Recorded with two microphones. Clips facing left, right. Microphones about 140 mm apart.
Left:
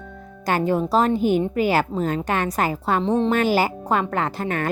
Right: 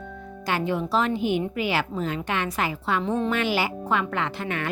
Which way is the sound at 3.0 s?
20° left (ahead or behind).